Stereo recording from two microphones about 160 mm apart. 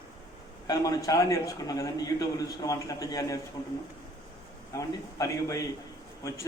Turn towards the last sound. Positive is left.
turn(degrees=20)  # may be behind; listen again after turning